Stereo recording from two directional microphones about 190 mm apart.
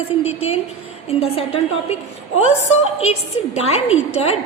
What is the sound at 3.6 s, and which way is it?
Speech, 35° left (ahead or behind).